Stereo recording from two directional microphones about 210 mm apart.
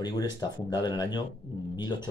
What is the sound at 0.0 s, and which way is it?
Speech, 20° left (ahead or behind).